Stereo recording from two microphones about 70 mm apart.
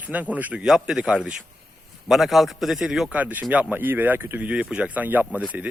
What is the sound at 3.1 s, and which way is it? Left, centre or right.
Speech, right.